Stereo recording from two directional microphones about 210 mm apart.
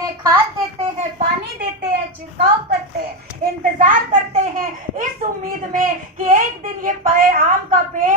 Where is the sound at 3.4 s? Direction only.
40° right (ahead or behind).